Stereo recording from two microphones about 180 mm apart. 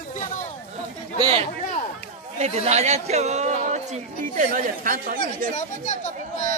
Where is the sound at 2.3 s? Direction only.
35° right (ahead or behind).